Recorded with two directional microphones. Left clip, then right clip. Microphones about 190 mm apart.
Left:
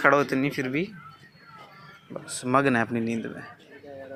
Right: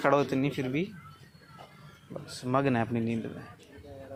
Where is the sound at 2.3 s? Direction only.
10° left (ahead or behind).